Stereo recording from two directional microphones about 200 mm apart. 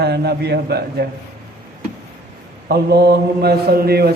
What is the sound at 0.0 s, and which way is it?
A man's voice, 55° right (ahead or behind).